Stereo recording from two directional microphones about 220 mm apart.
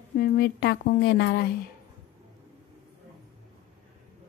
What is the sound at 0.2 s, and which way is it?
A woman's voice, 45° left (ahead or behind).